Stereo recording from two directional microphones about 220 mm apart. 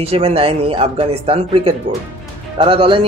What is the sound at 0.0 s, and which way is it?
A man's voice, 25° right (ahead or behind).